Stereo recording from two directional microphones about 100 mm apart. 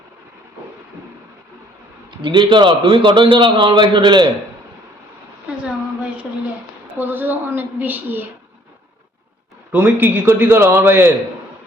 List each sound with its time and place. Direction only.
2.0 s a man's voice: 50° right (ahead or behind)
6.9 s a man's voice: 20° right (ahead or behind)
9.7 s a man's voice: 20° right (ahead or behind)